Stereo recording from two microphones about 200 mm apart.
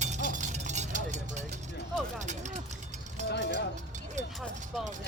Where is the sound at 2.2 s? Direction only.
35° right (ahead or behind).